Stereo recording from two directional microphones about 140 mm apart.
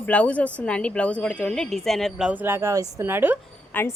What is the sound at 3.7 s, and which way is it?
Speech, 15° left (ahead or behind).